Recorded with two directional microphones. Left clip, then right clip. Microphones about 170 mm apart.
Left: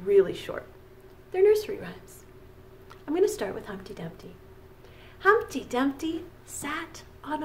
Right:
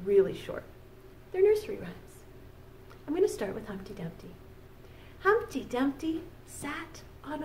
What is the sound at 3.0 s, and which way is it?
A woman's voice, 15° left (ahead or behind).